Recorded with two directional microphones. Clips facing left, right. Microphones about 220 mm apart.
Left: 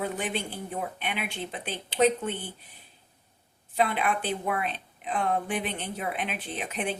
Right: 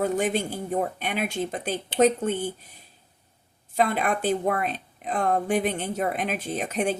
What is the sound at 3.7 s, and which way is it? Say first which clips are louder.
A woman's voice: right 3 dB; 45° right (ahead or behind).